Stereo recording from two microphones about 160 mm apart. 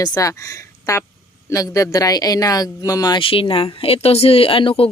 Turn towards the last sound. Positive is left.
turn(degrees=35)  # may be behind; listen again after turning